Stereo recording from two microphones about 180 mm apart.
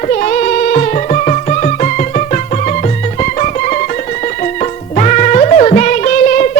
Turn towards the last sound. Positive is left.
turn(degrees=45)  # may be behind; listen again after turning